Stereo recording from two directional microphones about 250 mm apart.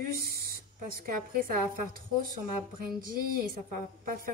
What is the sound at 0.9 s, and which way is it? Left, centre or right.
A woman's voice, right.